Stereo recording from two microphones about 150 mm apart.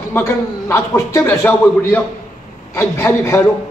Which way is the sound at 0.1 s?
20° left (ahead or behind).